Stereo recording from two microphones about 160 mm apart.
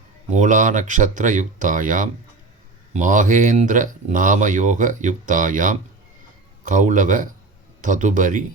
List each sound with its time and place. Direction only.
0.3 s speech: 50° right (ahead or behind)